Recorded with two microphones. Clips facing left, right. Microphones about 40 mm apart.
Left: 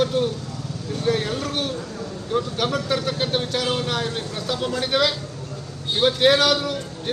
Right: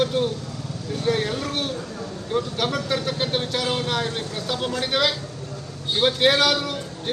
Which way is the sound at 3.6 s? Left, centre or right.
Centre.